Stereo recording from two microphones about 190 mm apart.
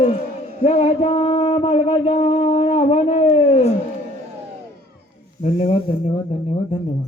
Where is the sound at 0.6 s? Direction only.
30° left (ahead or behind).